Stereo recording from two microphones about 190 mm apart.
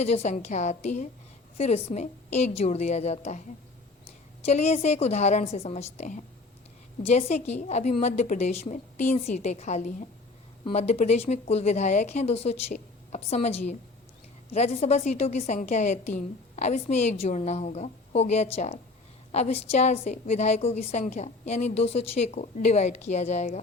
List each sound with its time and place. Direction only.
0.0 s a woman's voice: 35° left (ahead or behind)